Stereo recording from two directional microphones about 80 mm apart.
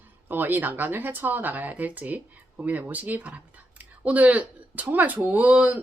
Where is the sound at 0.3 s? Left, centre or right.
Right.